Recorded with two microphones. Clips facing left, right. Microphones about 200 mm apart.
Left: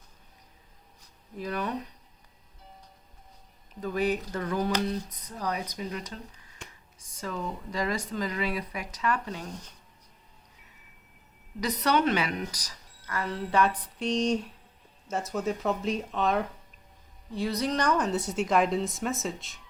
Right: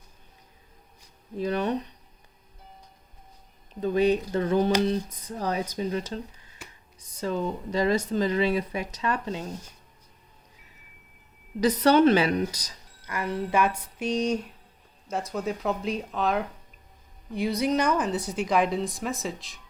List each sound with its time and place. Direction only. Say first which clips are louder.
1.4 s a woman's voice: right 6 dB; 25° right (ahead or behind)
3.8 s a woman's voice: right 6 dB; 25° right (ahead or behind)
6.6 s computer keyboard: even; 5° right (ahead or behind)
7.2 s a woman's voice: right 6 dB; 30° right (ahead or behind)
11.6 s a woman's voice: right 7 dB; 30° right (ahead or behind); by 16.5 s centre (ahead or behind)
17.3 s a woman's voice: right 4 dB; 10° right (ahead or behind)